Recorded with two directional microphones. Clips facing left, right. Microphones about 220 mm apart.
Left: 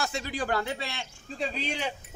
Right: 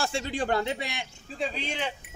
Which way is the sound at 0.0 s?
25° right (ahead or behind).